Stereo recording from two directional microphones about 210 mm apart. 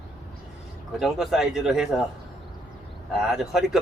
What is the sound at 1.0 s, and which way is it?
Speech, centre (ahead or behind).